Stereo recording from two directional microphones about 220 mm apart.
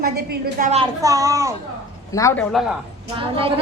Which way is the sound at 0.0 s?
45° right (ahead or behind).